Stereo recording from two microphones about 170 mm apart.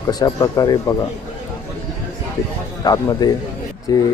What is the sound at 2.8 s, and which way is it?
Speech, 25° left (ahead or behind).